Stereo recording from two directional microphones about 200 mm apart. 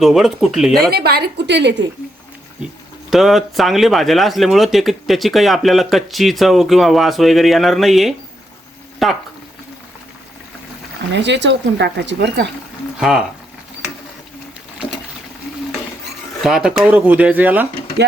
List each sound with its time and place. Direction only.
0.0 s speech: centre (ahead or behind)
0.9 s a woman's voice: 50° right (ahead or behind)
3.1 s speech: centre (ahead or behind)
11.1 s speech: 60° right (ahead or behind)
13.0 s speech: centre (ahead or behind)
16.4 s speech: 5° right (ahead or behind)